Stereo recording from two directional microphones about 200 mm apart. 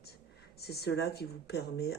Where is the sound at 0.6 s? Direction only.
55° left (ahead or behind).